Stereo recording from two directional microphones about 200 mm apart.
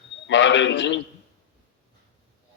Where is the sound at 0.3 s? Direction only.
65° left (ahead or behind).